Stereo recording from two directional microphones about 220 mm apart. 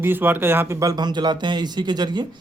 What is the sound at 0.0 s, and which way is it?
Speech, 10° right (ahead or behind).